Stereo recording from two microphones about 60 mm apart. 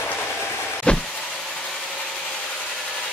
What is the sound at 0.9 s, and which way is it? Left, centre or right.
Vehicle, centre.